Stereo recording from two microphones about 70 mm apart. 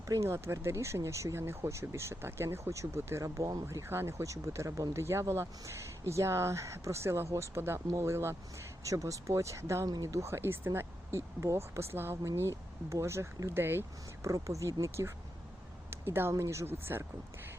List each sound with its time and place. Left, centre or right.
0.1 s speech: right
14.3 s speech: right
15.9 s a sound: right
16.3 s speech: right